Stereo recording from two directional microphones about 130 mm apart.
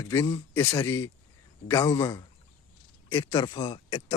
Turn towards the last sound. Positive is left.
turn(degrees=30)  # may be behind; listen again after turning